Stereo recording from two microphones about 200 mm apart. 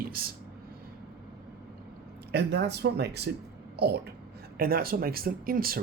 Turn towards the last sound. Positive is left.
turn(degrees=-45)  # may be behind; listen again after turning